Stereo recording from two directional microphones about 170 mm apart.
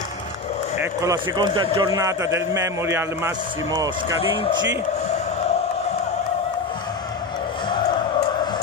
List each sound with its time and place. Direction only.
1.3 s a man's voice: 25° right (ahead or behind)